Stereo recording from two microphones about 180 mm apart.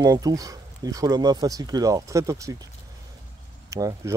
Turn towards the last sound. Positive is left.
turn(degrees=-20)  # may be behind; listen again after turning